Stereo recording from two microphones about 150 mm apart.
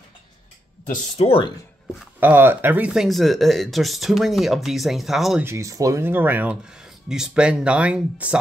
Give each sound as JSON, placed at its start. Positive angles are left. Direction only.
{"t": 1.1, "sound": "speech", "side_deg": 40}
{"t": 2.1, "sound": "speech", "side_deg": -15}
{"t": 5.4, "sound": "speech", "side_deg": -20}